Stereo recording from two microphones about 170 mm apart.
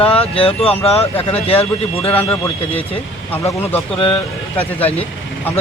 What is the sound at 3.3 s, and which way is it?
Speech, 10° left (ahead or behind).